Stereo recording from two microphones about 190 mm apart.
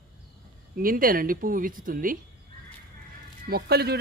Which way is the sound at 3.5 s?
55° right (ahead or behind).